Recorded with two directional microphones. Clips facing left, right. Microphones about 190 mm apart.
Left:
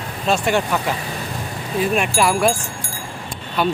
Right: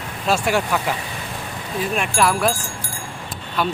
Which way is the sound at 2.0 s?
Centre (ahead or behind).